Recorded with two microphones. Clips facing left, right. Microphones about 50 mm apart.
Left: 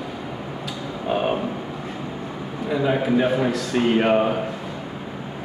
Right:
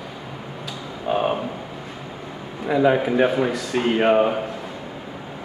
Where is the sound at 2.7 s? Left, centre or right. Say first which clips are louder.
Right 3 dB; centre.